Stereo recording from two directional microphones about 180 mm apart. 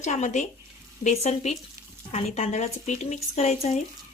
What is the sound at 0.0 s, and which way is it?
Speech, 40° left (ahead or behind).